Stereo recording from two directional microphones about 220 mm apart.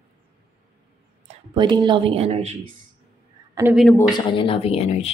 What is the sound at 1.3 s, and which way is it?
Speech, 20° right (ahead or behind).